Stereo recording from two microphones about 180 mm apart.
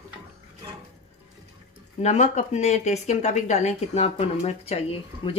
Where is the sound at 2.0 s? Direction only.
40° left (ahead or behind).